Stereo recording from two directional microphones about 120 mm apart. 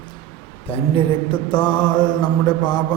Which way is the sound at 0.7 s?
45° left (ahead or behind).